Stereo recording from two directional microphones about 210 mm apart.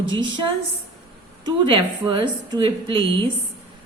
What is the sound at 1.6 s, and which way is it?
A woman's voice, 25° right (ahead or behind).